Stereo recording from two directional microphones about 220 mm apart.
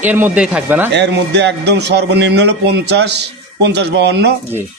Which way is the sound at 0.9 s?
50° right (ahead or behind).